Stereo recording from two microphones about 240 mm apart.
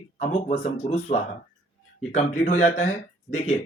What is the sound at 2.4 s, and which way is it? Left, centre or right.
Speech, left.